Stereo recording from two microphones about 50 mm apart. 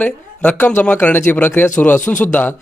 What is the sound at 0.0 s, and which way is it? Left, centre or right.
A man's voice, left.